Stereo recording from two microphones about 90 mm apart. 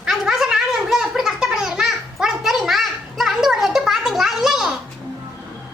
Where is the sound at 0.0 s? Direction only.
5° right (ahead or behind).